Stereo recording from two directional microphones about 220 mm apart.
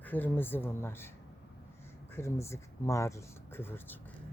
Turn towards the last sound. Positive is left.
turn(degrees=10)  # may be behind; listen again after turning